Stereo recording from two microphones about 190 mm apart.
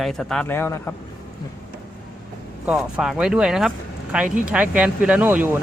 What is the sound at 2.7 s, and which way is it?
Speech, 5° right (ahead or behind).